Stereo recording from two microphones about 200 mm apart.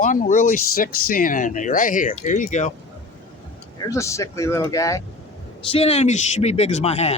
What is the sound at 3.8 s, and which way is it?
Speech, 15° left (ahead or behind).